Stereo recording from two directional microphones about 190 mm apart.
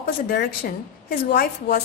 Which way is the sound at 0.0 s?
55° left (ahead or behind).